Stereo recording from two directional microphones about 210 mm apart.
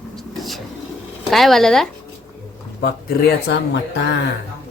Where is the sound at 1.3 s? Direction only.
Centre (ahead or behind).